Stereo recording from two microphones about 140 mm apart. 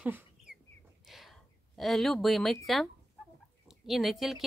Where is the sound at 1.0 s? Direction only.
Centre (ahead or behind).